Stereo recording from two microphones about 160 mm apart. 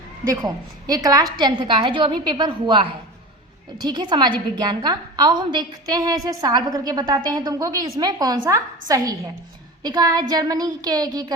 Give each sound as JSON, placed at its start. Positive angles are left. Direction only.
{"t": 0.3, "sound": "a woman's voice", "side_deg": -25}
{"t": 9.8, "sound": "a woman's voice", "side_deg": -25}